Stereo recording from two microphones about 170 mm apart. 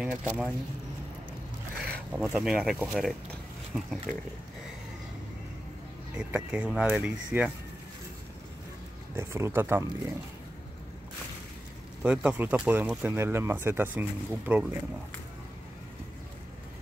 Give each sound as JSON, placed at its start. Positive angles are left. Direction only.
{"t": 0.0, "sound": "speech", "side_deg": -10}
{"t": 2.1, "sound": "speech", "side_deg": -10}
{"t": 6.1, "sound": "speech", "side_deg": -10}
{"t": 9.1, "sound": "speech", "side_deg": -15}
{"t": 12.0, "sound": "speech", "side_deg": -10}